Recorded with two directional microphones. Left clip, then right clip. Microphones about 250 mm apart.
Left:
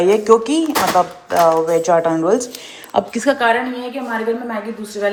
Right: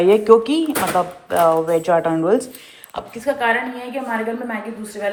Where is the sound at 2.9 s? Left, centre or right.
Left.